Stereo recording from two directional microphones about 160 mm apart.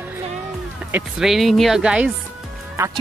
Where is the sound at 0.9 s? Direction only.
Centre (ahead or behind).